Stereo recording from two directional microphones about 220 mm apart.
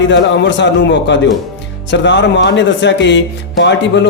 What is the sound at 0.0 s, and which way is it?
Speech, 55° left (ahead or behind).